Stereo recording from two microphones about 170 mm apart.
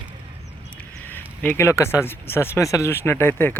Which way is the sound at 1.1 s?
10° left (ahead or behind).